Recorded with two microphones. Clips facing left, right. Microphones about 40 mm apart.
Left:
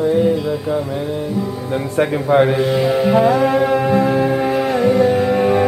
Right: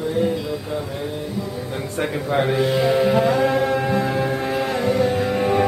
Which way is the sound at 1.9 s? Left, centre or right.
Centre.